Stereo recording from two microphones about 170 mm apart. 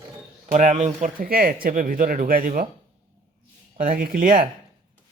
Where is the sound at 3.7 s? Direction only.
60° right (ahead or behind).